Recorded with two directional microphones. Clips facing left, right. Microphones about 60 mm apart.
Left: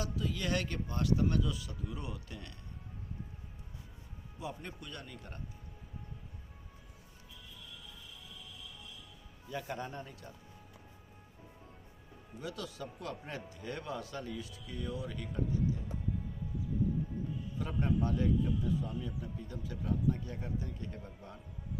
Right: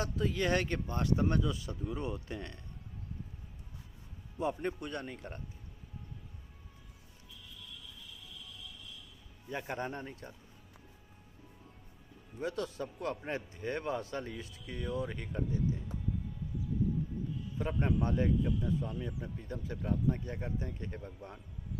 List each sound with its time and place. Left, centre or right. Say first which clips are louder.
0.0 s speech: right 4 dB; right
4.4 s speech: right 9 dB; right
9.5 s speech: right 2 dB; right
12.4 s speech: right 5 dB; right
17.6 s speech: right 1 dB; right